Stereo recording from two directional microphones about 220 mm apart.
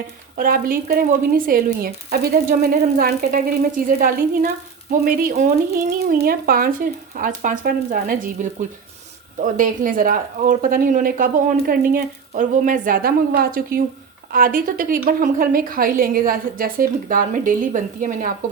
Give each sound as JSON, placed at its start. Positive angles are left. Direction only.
{"t": 0.3, "sound": "speech", "side_deg": -40}